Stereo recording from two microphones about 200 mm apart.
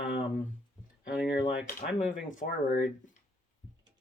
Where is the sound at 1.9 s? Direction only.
40° left (ahead or behind).